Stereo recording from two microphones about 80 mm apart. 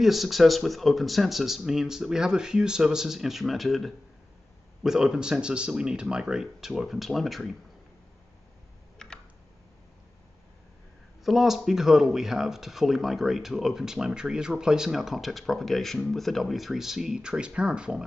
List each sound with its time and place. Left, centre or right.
0.0 s speech: centre
8.9 s computer keyboard: centre
11.2 s speech: centre